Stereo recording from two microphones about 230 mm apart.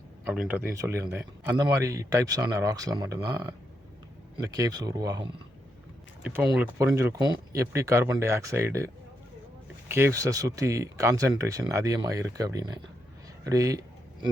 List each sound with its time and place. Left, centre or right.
0.3 s speech: centre
4.4 s speech: centre
9.9 s speech: centre